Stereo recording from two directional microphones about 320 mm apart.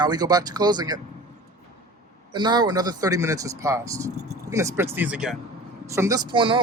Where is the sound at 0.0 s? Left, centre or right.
Centre.